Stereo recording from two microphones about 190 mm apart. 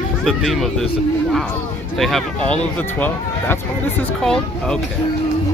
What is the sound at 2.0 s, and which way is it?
Speech, 5° left (ahead or behind).